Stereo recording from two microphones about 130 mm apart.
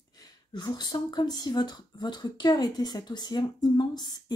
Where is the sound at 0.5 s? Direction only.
35° left (ahead or behind).